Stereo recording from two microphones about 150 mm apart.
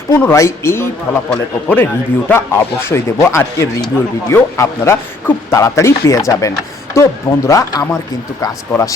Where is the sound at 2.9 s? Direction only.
15° left (ahead or behind).